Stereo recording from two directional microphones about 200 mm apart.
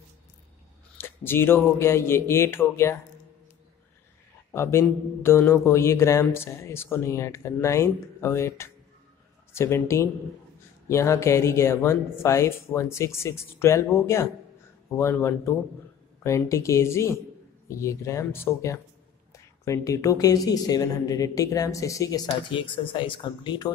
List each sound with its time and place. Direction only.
0.9 s a woman's voice: 10° left (ahead or behind)
4.5 s a woman's voice: 15° left (ahead or behind)